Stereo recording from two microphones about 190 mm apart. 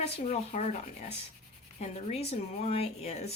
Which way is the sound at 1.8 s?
35° left (ahead or behind).